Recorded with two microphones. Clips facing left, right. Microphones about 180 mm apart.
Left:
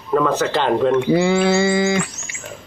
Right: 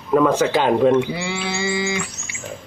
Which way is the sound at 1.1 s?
45° left (ahead or behind).